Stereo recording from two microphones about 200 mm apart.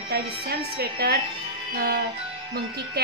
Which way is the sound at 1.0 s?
55° right (ahead or behind).